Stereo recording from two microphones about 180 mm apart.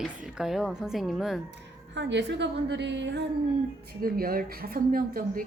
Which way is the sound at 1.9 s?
75° right (ahead or behind).